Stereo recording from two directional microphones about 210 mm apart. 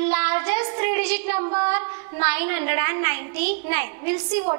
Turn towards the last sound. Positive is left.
turn(degrees=-10)  # may be behind; listen again after turning